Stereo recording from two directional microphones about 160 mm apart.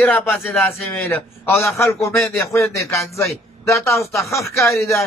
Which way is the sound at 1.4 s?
15° left (ahead or behind).